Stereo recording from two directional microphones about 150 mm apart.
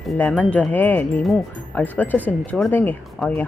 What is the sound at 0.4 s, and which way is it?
Speech, 10° left (ahead or behind).